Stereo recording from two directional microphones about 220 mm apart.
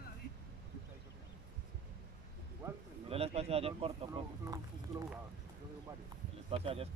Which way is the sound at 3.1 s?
25° right (ahead or behind).